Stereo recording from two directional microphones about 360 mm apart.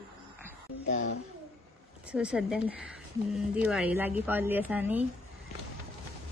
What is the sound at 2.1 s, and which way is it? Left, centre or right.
A woman's voice, centre.